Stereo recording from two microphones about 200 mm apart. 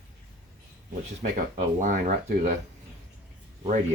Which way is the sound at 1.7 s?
40° right (ahead or behind).